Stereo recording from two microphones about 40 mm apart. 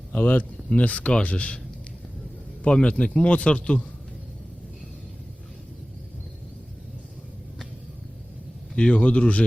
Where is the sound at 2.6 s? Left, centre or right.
Left.